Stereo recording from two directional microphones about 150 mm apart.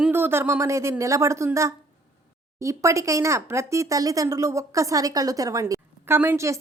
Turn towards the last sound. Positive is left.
turn(degrees=-20)  # may be behind; listen again after turning